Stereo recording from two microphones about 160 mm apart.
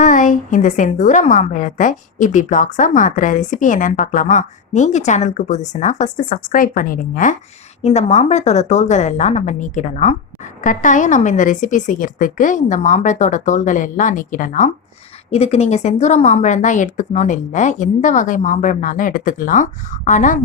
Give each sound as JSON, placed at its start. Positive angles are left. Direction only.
{"t": 0.0, "sound": "a woman's voice", "side_deg": 55}
{"t": 7.8, "sound": "a woman's voice", "side_deg": 45}
{"t": 15.3, "sound": "a woman's voice", "side_deg": 40}